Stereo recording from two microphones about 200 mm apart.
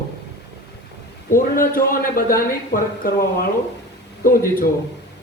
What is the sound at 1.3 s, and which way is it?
A man's voice, 45° left (ahead or behind).